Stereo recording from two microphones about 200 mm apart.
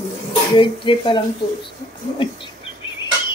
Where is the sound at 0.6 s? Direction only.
25° left (ahead or behind).